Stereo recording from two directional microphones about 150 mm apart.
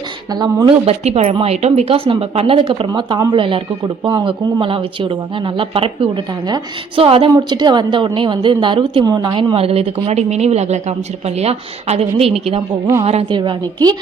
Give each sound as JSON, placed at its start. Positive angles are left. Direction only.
{"t": 0.3, "sound": "a woman's voice", "side_deg": -30}